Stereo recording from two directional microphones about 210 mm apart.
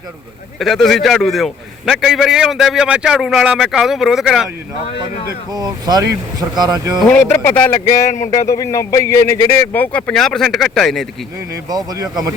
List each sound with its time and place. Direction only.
0.6 s a man's voice: centre (ahead or behind)
5.5 s speech: 20° right (ahead or behind)
7.0 s a man's voice: 10° left (ahead or behind)
11.5 s speech: 20° right (ahead or behind)